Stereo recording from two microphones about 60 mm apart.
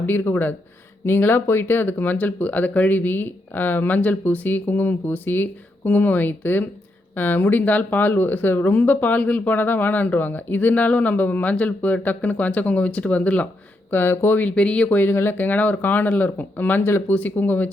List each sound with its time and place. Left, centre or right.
0.0 s speech: left
13.9 s speech: left
15.1 s speech: left